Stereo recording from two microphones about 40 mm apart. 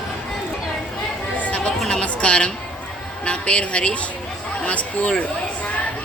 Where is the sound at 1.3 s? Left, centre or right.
Left.